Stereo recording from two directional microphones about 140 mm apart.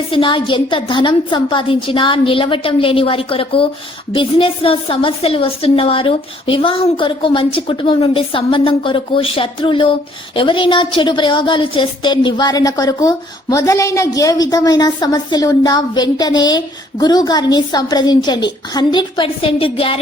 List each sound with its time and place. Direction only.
0.1 s a woman's voice: 35° left (ahead or behind)